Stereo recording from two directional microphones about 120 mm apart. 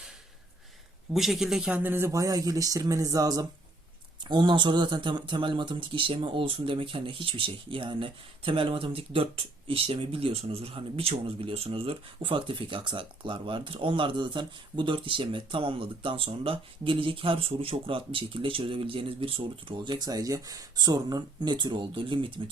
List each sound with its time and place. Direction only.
1.1 s speech: centre (ahead or behind); by 22.4 s 45° right (ahead or behind)